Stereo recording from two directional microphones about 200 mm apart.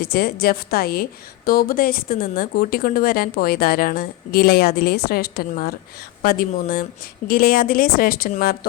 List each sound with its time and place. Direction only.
0.0 s speech: 50° left (ahead or behind)